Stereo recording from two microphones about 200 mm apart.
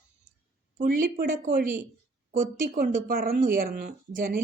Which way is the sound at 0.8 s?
45° right (ahead or behind).